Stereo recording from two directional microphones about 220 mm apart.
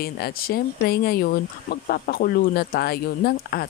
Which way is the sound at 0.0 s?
45° left (ahead or behind).